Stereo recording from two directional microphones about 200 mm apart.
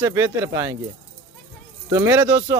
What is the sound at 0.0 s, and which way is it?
Speech, 15° right (ahead or behind).